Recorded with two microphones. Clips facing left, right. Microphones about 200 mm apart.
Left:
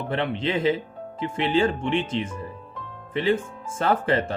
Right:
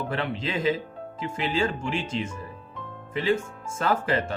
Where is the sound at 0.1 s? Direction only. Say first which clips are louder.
Left 4 dB; 30° left (ahead or behind).